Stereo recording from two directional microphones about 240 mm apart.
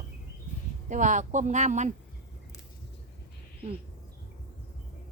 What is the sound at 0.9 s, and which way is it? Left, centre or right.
Speech, right.